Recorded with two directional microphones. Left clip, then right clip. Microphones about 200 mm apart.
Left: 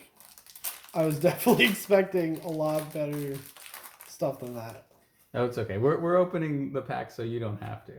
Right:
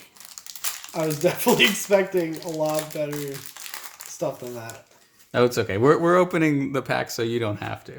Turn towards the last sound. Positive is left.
turn(degrees=-60)  # may be behind; listen again after turning